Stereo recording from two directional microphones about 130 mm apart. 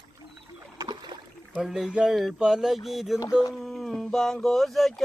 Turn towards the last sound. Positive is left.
turn(degrees=0)  # may be behind; listen again after turning